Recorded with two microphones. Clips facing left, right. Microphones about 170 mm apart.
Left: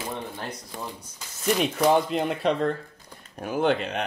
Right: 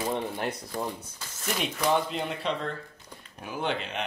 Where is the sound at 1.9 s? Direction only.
45° left (ahead or behind).